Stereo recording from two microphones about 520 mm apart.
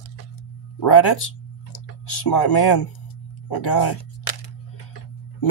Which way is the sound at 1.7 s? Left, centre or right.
Left.